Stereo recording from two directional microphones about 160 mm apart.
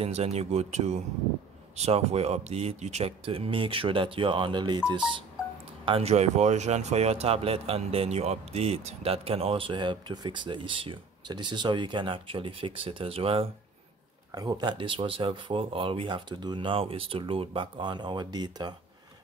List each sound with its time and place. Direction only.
0.0 s speech: 40° right (ahead or behind)
5.9 s speech: 40° right (ahead or behind)
14.3 s speech: 25° right (ahead or behind)